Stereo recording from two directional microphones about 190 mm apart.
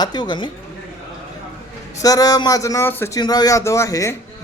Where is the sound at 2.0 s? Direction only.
20° left (ahead or behind).